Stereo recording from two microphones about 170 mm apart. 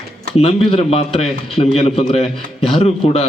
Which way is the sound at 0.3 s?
35° left (ahead or behind).